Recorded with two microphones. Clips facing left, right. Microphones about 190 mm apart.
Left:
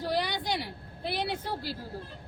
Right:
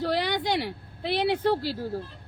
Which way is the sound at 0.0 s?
70° right (ahead or behind).